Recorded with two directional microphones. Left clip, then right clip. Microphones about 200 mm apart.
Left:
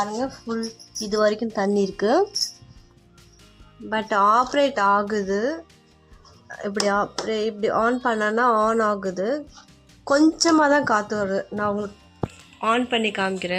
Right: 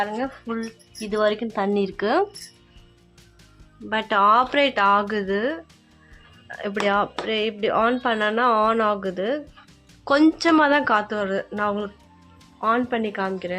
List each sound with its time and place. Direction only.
0.0 s speech: centre (ahead or behind)
1.8 s speech: 15° left (ahead or behind)
3.8 s speech: 5° left (ahead or behind)
13.3 s speech: 15° left (ahead or behind)